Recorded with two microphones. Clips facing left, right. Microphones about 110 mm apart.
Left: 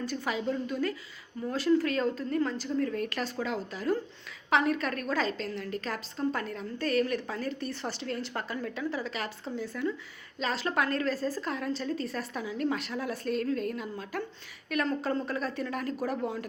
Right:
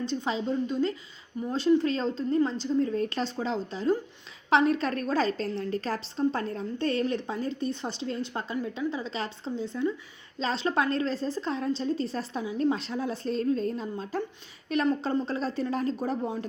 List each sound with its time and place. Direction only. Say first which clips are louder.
0.0 s a woman's voice: right 2 dB; 25° right (ahead or behind)